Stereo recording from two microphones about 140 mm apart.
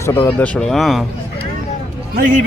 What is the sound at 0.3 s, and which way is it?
Speech, 10° left (ahead or behind).